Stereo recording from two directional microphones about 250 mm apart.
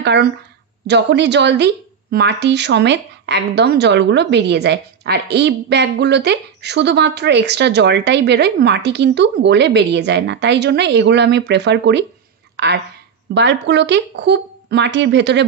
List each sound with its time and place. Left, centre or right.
0.0 s a woman's voice: right